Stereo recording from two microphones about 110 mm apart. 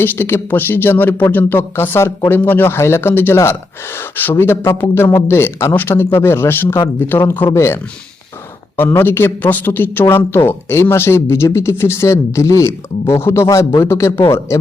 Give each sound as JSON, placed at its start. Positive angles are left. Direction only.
{"t": 0.0, "sound": "a man's voice", "side_deg": 20}